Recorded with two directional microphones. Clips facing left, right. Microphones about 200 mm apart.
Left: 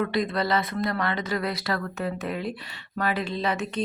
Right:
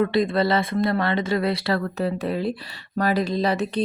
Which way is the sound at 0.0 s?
30° right (ahead or behind).